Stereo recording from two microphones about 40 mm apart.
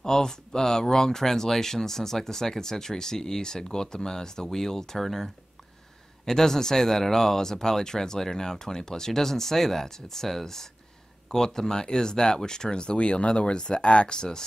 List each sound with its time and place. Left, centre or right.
0.0 s speech: centre